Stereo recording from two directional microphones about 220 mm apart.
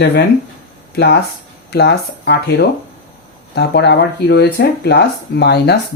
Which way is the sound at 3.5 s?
50° left (ahead or behind).